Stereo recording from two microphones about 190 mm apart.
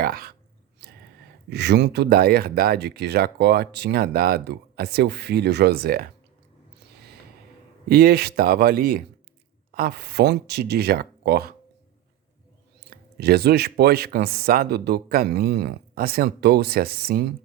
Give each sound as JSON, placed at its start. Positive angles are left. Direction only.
{"t": 0.0, "sound": "speech", "side_deg": -50}
{"t": 0.8, "sound": "a sound", "side_deg": -55}
{"t": 1.5, "sound": "speech", "side_deg": -60}
{"t": 7.9, "sound": "speech", "side_deg": -55}
{"t": 12.9, "sound": "speech", "side_deg": -60}